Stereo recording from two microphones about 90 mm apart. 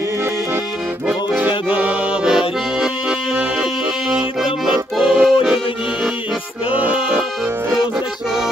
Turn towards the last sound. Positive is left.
turn(degrees=-10)  # may be behind; listen again after turning